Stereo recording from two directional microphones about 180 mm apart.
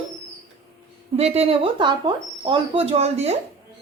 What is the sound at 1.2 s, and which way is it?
Speech, 35° right (ahead or behind).